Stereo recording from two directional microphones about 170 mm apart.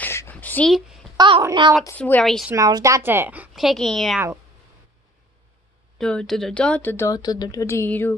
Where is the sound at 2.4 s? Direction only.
20° right (ahead or behind); by 4.2 s centre (ahead or behind).